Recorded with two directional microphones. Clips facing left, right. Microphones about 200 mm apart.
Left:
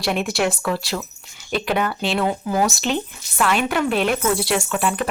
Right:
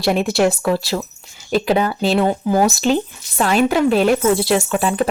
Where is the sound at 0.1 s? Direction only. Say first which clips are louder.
Right 5 dB; 35° right (ahead or behind).